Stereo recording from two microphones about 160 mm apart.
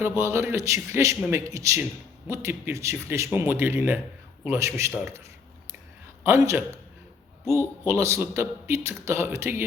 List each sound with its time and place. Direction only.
0.2 s a man's voice: 15° right (ahead or behind)
6.2 s a man's voice: 20° right (ahead or behind)
7.9 s a man's voice: 20° right (ahead or behind)